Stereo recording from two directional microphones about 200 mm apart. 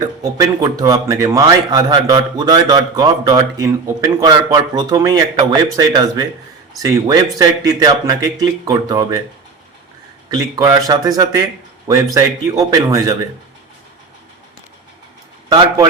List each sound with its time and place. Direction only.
0.2 s a man's voice: 15° right (ahead or behind)
10.2 s a man's voice: 20° right (ahead or behind)
15.4 s a man's voice: 20° right (ahead or behind)